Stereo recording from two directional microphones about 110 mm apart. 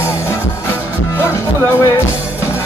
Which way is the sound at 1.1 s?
20° left (ahead or behind).